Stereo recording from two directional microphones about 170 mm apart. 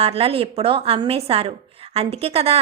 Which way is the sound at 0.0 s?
35° right (ahead or behind).